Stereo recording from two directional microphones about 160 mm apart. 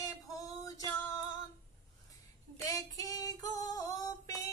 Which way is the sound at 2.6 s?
20° left (ahead or behind).